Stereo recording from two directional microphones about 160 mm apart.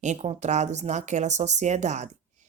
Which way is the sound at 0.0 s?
45° right (ahead or behind).